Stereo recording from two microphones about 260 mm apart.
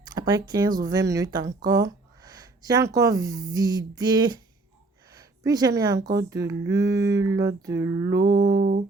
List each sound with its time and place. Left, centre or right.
0.0 s speech: centre
6.3 s a sound: centre
8.1 s music: right